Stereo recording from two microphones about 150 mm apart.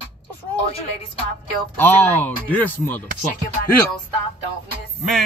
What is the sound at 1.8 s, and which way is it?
Speech, 15° left (ahead or behind).